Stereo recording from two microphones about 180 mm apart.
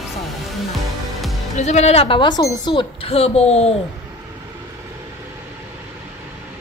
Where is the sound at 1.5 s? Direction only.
40° left (ahead or behind).